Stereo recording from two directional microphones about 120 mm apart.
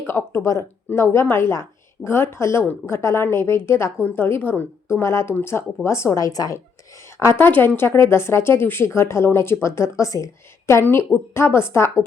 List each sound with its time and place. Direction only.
0.1 s a woman's voice: 20° left (ahead or behind)